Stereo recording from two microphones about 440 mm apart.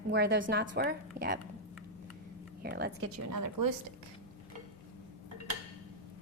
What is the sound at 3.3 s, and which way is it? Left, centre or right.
Speech, right.